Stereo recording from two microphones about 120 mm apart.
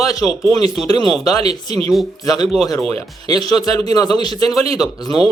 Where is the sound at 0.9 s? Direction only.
35° left (ahead or behind).